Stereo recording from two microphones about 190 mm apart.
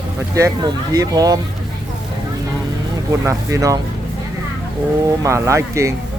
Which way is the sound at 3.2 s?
15° right (ahead or behind).